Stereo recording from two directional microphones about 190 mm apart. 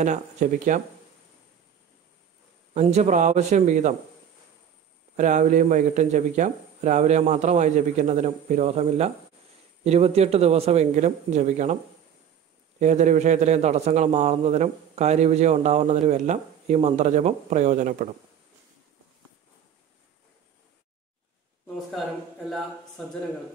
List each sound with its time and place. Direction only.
0.0 s a man's voice: 40° right (ahead or behind)
2.7 s a man's voice: 35° right (ahead or behind)
5.1 s a man's voice: 40° right (ahead or behind)